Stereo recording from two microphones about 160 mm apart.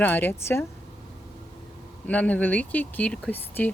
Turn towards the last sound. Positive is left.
turn(degrees=15)  # may be behind; listen again after turning